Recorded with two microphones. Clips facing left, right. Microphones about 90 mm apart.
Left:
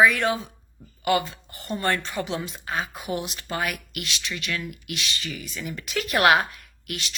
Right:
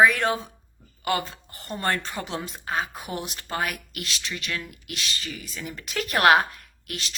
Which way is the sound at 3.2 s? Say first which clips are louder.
Even; 40° right (ahead or behind).